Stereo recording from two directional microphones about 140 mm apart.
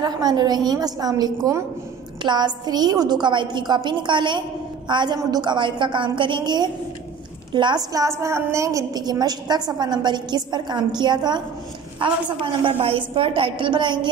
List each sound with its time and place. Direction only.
0.0 s a woman's voice: 30° right (ahead or behind)